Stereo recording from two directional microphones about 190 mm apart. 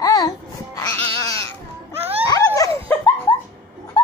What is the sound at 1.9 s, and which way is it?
Wail, 10° right (ahead or behind).